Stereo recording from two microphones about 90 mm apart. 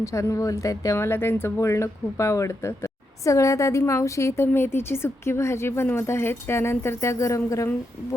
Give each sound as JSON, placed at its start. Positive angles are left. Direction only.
{"t": 0.0, "sound": "speech", "side_deg": 35}